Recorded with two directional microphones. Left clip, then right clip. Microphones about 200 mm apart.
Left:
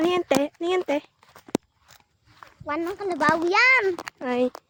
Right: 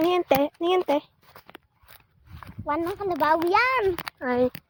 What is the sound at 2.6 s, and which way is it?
A child's voice, 10° right (ahead or behind).